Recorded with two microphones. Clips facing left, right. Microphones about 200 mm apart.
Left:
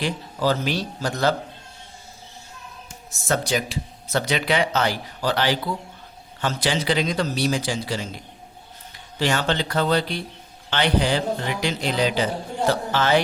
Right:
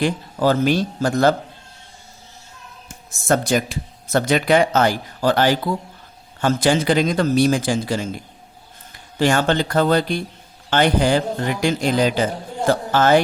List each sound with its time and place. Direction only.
0.0 s a man's voice: 50° right (ahead or behind)
3.1 s a man's voice: 50° right (ahead or behind)